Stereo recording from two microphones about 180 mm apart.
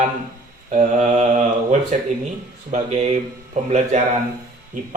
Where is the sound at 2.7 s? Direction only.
40° right (ahead or behind).